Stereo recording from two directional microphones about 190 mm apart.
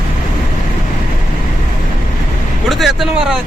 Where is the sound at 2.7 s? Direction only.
Centre (ahead or behind).